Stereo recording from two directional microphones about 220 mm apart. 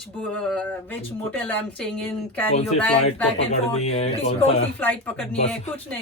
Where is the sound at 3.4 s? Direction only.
30° left (ahead or behind).